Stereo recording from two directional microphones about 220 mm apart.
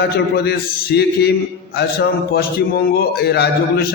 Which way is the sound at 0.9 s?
50° left (ahead or behind).